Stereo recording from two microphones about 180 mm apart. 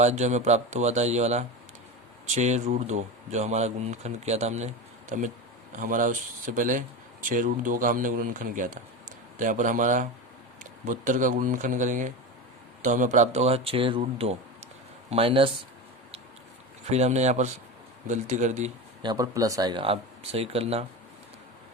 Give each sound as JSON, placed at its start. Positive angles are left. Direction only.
{"t": 0.0, "sound": "speech", "side_deg": -40}
{"t": 16.9, "sound": "speech", "side_deg": -40}
{"t": 19.0, "sound": "speech", "side_deg": -20}